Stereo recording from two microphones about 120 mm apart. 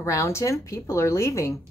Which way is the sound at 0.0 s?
25° left (ahead or behind).